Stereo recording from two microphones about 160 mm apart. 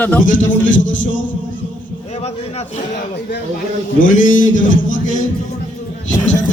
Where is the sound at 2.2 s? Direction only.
40° left (ahead or behind).